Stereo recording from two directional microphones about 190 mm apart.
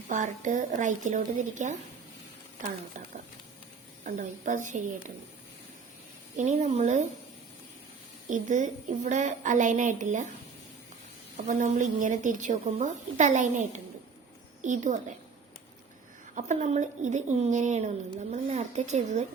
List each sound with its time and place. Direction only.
0.1 s a woman's voice: 40° right (ahead or behind)
4.0 s a woman's voice: 40° right (ahead or behind)
6.3 s a woman's voice: 40° right (ahead or behind)
8.3 s a woman's voice: 40° right (ahead or behind)
11.3 s a woman's voice: 40° right (ahead or behind)
16.3 s a woman's voice: 40° right (ahead or behind)